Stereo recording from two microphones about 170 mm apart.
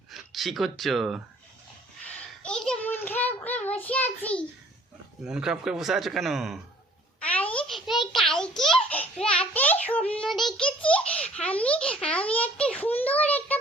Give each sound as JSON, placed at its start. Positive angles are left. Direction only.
{"t": 0.1, "sound": "speech", "side_deg": 0}
{"t": 2.4, "sound": "child singing", "side_deg": 5}
{"t": 5.2, "sound": "a man's voice", "side_deg": -5}
{"t": 7.2, "sound": "a sound", "side_deg": 10}
{"t": 10.8, "sound": "baby laughter", "side_deg": 5}